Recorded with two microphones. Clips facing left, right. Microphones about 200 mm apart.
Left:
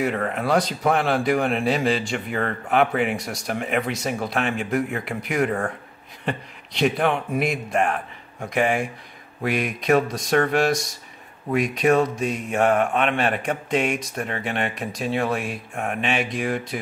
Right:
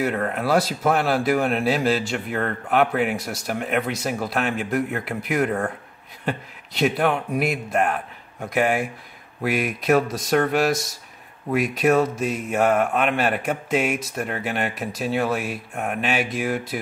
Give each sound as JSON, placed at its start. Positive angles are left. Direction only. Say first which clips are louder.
{"t": 0.0, "sound": "speech", "louder": "even", "side_deg": 0}